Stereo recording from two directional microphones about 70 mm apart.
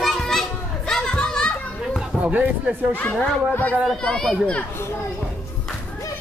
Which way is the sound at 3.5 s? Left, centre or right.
Left.